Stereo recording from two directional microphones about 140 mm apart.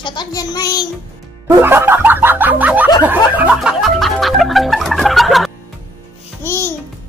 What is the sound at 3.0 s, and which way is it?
Snicker, 10° right (ahead or behind).